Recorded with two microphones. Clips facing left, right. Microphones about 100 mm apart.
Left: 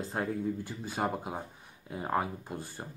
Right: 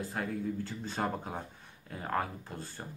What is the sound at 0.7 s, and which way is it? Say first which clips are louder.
Speech: left 1 dB; 10° left (ahead or behind).